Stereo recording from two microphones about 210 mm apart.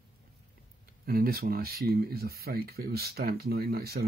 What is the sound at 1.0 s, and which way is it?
Speech, 45° right (ahead or behind).